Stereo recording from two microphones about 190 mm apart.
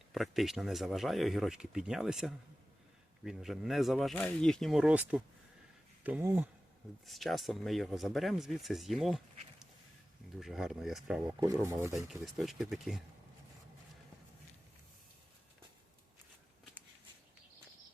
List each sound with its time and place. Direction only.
0.1 s speech: centre (ahead or behind)
7.0 s speech: centre (ahead or behind)
11.3 s speech: 15° right (ahead or behind)
11.9 s speech: centre (ahead or behind)